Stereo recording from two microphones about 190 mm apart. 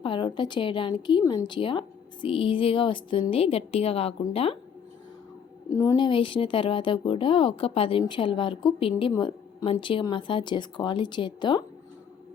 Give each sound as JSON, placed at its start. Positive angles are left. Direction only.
{"t": 0.0, "sound": "speech", "side_deg": 25}
{"t": 5.6, "sound": "speech", "side_deg": 15}